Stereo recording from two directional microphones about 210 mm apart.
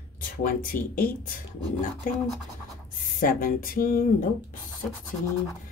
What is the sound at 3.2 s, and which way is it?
Speech, 40° left (ahead or behind).